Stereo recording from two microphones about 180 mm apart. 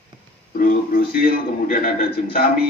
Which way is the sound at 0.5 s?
55° left (ahead or behind).